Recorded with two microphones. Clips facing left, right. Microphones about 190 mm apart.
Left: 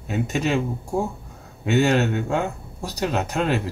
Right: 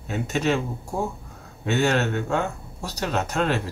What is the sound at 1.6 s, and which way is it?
Speech, 15° left (ahead or behind).